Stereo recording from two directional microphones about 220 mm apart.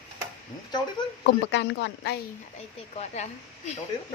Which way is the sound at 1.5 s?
55° left (ahead or behind).